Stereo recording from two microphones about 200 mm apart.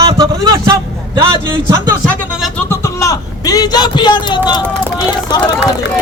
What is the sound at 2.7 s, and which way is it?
Speech, 15° left (ahead or behind).